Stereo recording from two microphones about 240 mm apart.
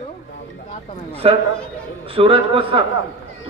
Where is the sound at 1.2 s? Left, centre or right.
Right.